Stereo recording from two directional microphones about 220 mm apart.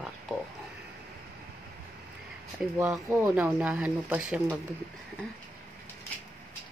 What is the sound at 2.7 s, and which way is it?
Speech, 10° right (ahead or behind).